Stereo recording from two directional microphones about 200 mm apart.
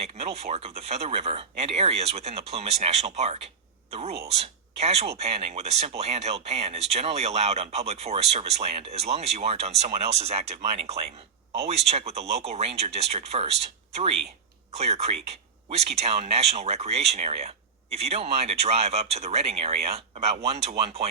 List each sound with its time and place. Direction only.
0.0 s speech: 30° right (ahead or behind)